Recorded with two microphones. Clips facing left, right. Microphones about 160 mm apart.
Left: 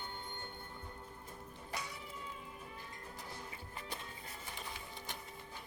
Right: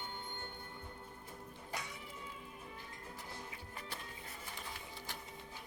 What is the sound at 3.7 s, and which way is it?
Music, 20° left (ahead or behind).